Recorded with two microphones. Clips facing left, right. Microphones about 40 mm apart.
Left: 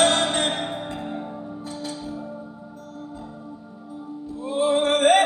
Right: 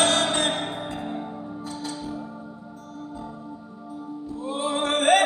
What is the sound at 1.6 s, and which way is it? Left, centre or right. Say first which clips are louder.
Music: even; centre.